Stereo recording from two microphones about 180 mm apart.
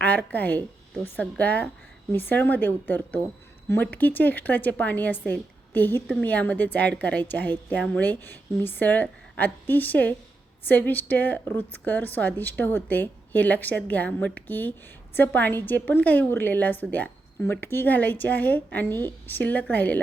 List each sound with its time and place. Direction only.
0.0 s speech: 10° left (ahead or behind)